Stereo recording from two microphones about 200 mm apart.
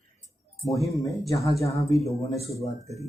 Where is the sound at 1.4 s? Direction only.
15° left (ahead or behind).